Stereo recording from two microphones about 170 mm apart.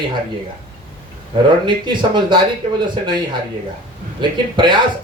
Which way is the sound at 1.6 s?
25° right (ahead or behind).